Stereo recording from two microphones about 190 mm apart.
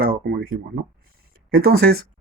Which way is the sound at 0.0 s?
50° right (ahead or behind).